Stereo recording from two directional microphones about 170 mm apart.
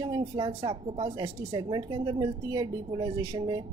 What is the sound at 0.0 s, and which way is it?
A woman's voice, 25° right (ahead or behind).